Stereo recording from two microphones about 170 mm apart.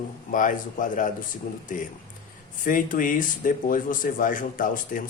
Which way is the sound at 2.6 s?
50° left (ahead or behind).